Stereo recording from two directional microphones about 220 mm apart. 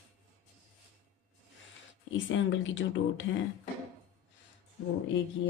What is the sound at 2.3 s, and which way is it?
Speech, 60° left (ahead or behind).